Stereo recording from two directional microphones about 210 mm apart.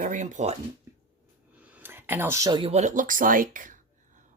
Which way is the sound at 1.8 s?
10° right (ahead or behind).